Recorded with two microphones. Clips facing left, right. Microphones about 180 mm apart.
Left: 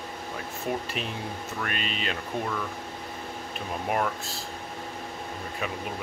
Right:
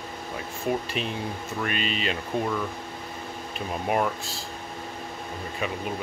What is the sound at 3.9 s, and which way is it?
Speech, centre (ahead or behind).